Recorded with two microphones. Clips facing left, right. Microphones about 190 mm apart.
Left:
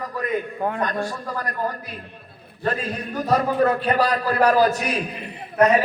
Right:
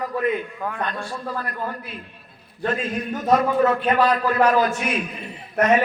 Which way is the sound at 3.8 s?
35° left (ahead or behind).